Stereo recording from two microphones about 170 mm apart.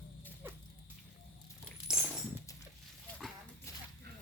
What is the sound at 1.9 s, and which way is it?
Coin, 5° right (ahead or behind).